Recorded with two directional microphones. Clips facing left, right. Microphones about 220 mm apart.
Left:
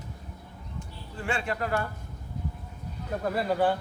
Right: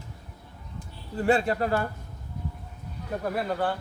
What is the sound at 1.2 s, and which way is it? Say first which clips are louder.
Speech: right 7 dB; 40° right (ahead or behind).